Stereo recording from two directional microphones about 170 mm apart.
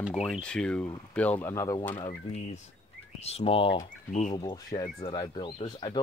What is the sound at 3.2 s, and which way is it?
Speech, 35° left (ahead or behind).